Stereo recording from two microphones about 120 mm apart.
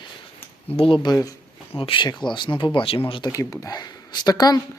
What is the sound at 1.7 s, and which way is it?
Speech, 45° left (ahead or behind).